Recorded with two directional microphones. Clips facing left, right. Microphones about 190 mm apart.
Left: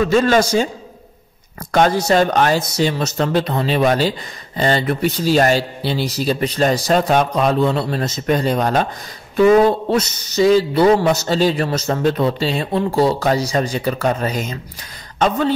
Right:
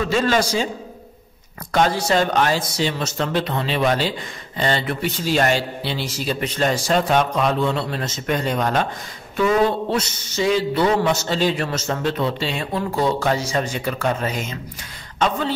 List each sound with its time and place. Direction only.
0.1 s speech: 45° left (ahead or behind)
1.7 s a man's voice: 45° left (ahead or behind)